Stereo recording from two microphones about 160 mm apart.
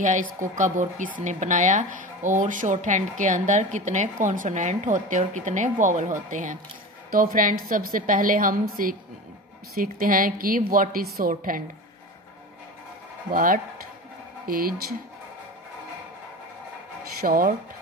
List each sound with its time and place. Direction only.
0.0 s a woman's voice: 50° right (ahead or behind)
13.3 s a woman's voice: 60° right (ahead or behind)
17.2 s a woman's voice: 60° right (ahead or behind)